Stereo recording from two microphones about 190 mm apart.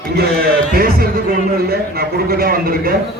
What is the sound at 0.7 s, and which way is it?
Music, 50° right (ahead or behind).